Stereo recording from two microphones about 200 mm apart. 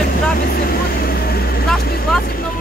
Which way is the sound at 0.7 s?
50° left (ahead or behind).